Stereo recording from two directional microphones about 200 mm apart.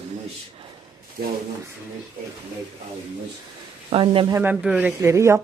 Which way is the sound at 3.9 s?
25° right (ahead or behind).